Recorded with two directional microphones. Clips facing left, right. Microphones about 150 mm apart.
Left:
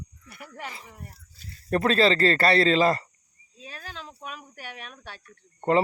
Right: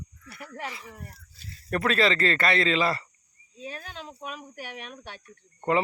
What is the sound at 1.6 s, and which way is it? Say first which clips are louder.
A man's voice: left 3 dB; 30° left (ahead or behind).